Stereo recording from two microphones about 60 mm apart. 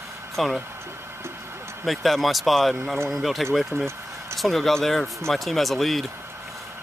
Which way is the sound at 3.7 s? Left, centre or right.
Right.